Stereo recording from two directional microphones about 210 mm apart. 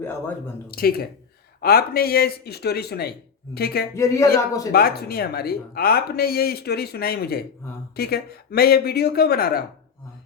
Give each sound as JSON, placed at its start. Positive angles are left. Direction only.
{"t": 0.0, "sound": "a man's voice", "side_deg": 10}
{"t": 0.7, "sound": "speech", "side_deg": 45}
{"t": 3.9, "sound": "a man's voice", "side_deg": 15}
{"t": 4.7, "sound": "speech", "side_deg": 45}